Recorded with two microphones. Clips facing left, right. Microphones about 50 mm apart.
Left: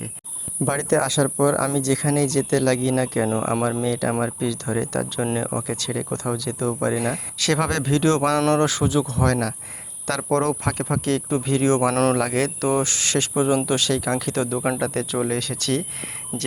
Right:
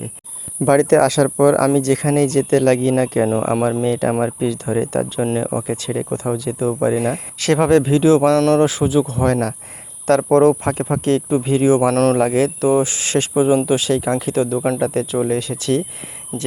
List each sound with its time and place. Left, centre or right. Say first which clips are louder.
0.6 s speech: right 8 dB; right
5.2 s speech: right 4 dB; centre
5.6 s speech: right 5 dB; right
7.3 s speech: right 10 dB; right
8.4 s speech: right 5 dB; centre
10.1 s speech: right 9 dB; right
11.3 s speech: right 5 dB; centre
12.1 s speech: right 6 dB; right
12.4 s speech: right 6 dB; centre
12.8 s speech: right 4 dB; right
13.3 s speech: right 6 dB; centre
14.8 s speech: right 5 dB; centre
16.3 s speech: right 5 dB; centre